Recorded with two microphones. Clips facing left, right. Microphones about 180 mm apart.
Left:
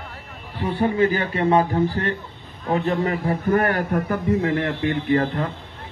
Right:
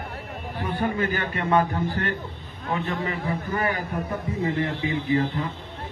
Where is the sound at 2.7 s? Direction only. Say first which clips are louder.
Left 6 dB; 40° left (ahead or behind).